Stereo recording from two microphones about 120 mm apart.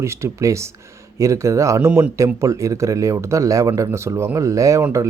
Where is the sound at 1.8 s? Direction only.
10° right (ahead or behind).